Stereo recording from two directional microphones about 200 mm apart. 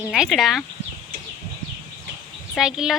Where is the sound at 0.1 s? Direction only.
Centre (ahead or behind).